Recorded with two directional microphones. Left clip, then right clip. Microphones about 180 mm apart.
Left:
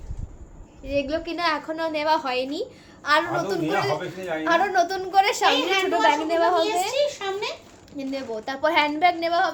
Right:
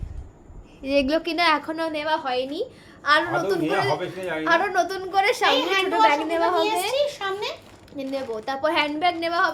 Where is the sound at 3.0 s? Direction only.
5° right (ahead or behind).